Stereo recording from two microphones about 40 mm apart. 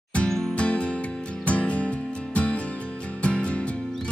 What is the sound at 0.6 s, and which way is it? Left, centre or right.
Music, left.